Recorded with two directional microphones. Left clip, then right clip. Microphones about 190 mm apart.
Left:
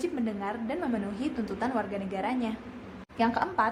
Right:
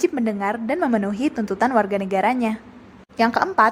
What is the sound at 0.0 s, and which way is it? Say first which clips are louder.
A woman's voice: right 11 dB; 40° right (ahead or behind).